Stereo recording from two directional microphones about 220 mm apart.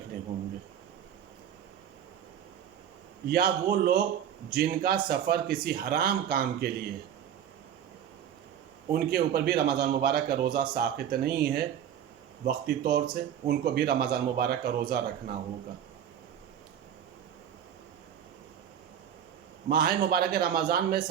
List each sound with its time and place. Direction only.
3.2 s a man's voice: 45° right (ahead or behind)
8.9 s a man's voice: 45° right (ahead or behind)
19.7 s a man's voice: 45° right (ahead or behind)